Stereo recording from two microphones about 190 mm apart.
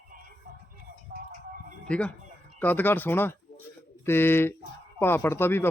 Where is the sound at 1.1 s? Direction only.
50° right (ahead or behind).